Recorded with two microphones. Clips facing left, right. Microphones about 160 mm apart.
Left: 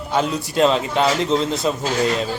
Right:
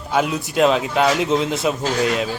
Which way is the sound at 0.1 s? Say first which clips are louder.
Right 1 dB; 5° right (ahead or behind).